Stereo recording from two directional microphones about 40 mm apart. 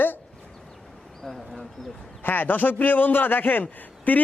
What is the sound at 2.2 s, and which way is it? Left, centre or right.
Speech, left.